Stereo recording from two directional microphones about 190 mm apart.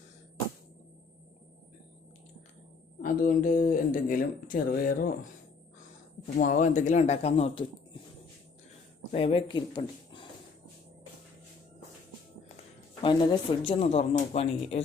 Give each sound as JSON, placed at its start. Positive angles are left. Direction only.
{"t": 3.0, "sound": "speech", "side_deg": 45}
{"t": 6.3, "sound": "speech", "side_deg": 40}
{"t": 9.1, "sound": "speech", "side_deg": 30}
{"t": 13.0, "sound": "speech", "side_deg": 25}